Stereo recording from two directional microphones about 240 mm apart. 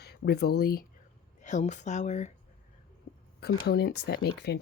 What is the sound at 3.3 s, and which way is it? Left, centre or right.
Speech, left.